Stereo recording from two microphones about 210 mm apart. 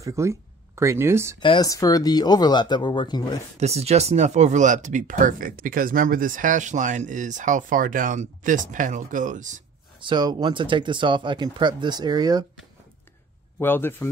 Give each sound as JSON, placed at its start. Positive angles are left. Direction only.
{"t": 0.0, "sound": "speech", "side_deg": -15}
{"t": 1.4, "sound": "speech", "side_deg": 20}
{"t": 3.5, "sound": "speech", "side_deg": -30}
{"t": 9.9, "sound": "speech", "side_deg": -20}
{"t": 13.6, "sound": "a man's voice", "side_deg": 10}